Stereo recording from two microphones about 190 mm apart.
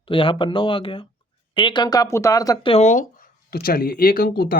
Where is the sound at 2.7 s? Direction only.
40° left (ahead or behind).